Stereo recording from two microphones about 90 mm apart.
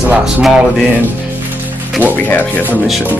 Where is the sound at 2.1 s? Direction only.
20° left (ahead or behind).